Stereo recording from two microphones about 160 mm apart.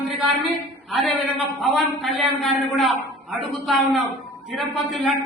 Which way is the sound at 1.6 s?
Centre (ahead or behind).